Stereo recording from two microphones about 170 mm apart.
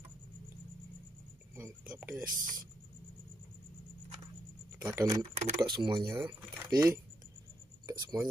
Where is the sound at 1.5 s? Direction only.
10° right (ahead or behind).